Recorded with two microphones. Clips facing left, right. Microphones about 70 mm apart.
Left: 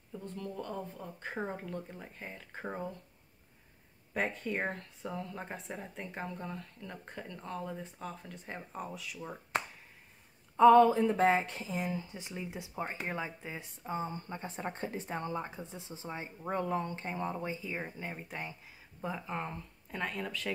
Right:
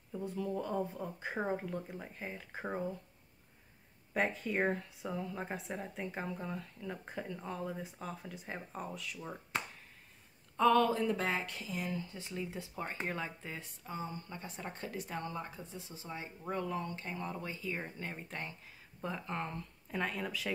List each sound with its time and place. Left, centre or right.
0.1 s speech: centre
4.1 s speech: centre
10.5 s speech: centre